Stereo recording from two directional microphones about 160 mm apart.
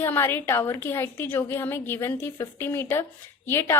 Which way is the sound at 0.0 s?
15° left (ahead or behind).